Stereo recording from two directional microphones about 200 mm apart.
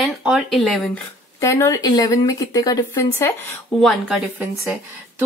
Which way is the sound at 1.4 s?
15° left (ahead or behind).